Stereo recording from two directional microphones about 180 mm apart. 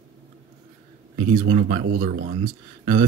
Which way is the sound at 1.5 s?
40° right (ahead or behind).